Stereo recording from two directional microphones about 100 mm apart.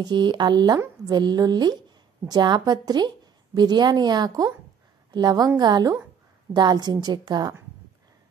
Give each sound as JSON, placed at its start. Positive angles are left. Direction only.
{"t": 0.0, "sound": "a woman's voice", "side_deg": -50}